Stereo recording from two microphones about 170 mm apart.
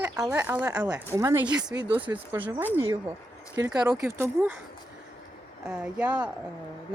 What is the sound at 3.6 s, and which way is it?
Speech, 20° right (ahead or behind).